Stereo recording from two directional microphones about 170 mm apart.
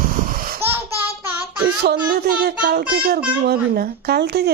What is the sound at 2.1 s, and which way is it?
A child's voice, 60° right (ahead or behind).